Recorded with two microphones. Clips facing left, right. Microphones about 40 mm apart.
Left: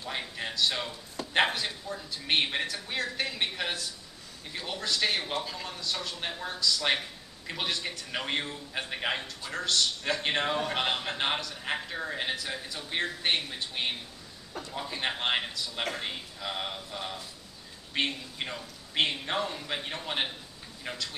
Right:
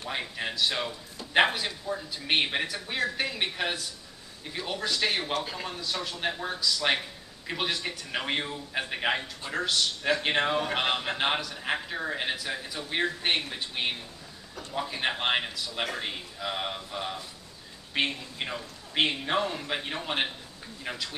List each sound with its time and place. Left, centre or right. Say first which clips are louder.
0.1 s a man's voice: right 2 dB; centre
5.4 s a man's voice: right 3 dB; centre
5.7 s a man's voice: right 2 dB; centre